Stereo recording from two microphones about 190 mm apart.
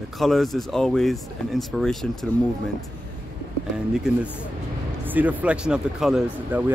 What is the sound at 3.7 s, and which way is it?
Speech, 5° right (ahead or behind).